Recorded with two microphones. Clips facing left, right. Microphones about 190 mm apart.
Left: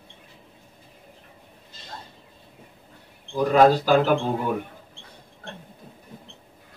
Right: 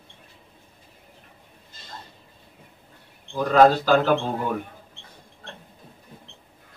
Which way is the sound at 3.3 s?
10° left (ahead or behind).